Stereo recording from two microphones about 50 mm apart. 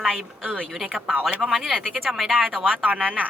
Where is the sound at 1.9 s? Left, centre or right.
Centre.